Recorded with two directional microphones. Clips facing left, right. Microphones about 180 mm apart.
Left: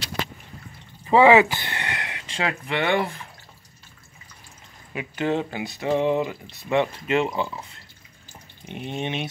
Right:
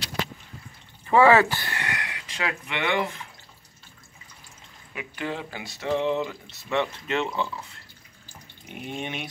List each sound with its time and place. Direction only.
1.0 s speech: 15° left (ahead or behind); by 3.2 s 35° left (ahead or behind)
4.9 s speech: 25° left (ahead or behind)
8.6 s speech: 25° left (ahead or behind)